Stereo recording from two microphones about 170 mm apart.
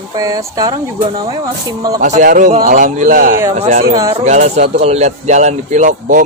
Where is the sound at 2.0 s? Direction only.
45° right (ahead or behind).